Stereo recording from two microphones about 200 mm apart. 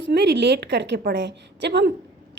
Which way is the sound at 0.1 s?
55° right (ahead or behind).